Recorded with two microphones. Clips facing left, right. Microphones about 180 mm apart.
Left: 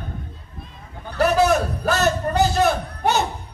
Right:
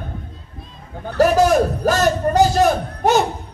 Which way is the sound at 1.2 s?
40° right (ahead or behind).